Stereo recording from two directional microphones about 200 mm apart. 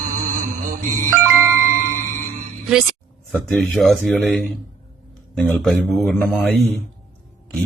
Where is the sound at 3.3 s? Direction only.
5° left (ahead or behind).